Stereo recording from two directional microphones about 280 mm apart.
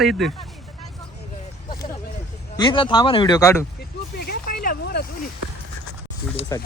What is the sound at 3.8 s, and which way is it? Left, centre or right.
Vehicle, left.